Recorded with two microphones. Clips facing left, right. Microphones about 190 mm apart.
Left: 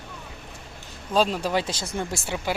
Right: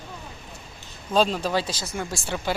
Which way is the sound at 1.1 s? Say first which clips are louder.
Even; 5° left (ahead or behind).